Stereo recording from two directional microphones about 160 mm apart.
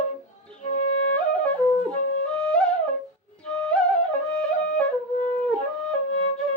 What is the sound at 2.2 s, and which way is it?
Music, 5° left (ahead or behind).